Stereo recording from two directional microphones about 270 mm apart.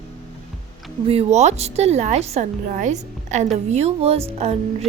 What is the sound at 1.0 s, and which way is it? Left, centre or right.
A woman's voice, right.